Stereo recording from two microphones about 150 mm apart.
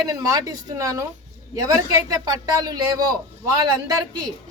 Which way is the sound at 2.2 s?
25° right (ahead or behind).